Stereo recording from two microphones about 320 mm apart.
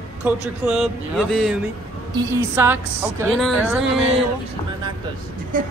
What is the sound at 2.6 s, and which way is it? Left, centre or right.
Speech, centre.